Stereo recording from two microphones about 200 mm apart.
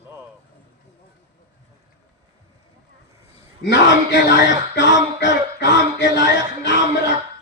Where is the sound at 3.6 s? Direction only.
60° left (ahead or behind).